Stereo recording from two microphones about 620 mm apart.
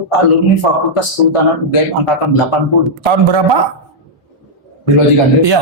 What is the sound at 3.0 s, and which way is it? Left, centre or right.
Speech, right.